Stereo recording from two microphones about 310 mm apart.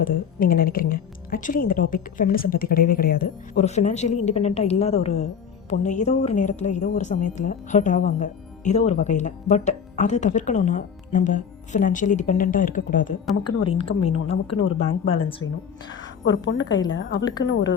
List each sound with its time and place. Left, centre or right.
0.0 s speech: left
13.5 s a woman's voice: left
13.7 s speech: centre
15.9 s a woman's voice: left